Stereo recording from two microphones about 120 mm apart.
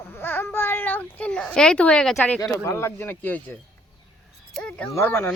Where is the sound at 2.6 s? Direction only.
20° left (ahead or behind).